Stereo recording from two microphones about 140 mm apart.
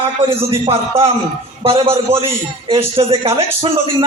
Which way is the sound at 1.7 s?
40° right (ahead or behind).